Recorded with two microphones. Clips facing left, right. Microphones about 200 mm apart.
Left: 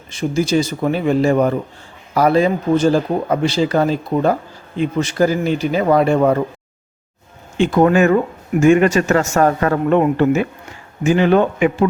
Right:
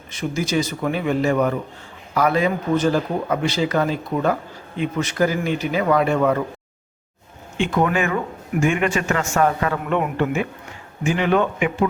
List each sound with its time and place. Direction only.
0.1 s speech: 30° left (ahead or behind)
7.6 s speech: 35° left (ahead or behind)